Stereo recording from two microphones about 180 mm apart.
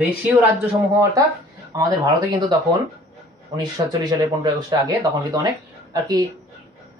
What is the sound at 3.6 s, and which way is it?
Speech, 25° right (ahead or behind).